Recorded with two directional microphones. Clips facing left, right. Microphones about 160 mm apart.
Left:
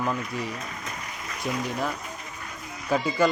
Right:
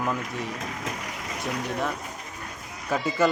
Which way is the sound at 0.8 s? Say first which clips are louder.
Right 4 dB; 85° right.